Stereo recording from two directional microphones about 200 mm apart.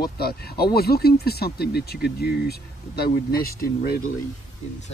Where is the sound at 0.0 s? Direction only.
50° left (ahead or behind).